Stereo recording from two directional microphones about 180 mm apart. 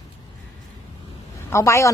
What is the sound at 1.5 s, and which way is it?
Speech, 15° left (ahead or behind).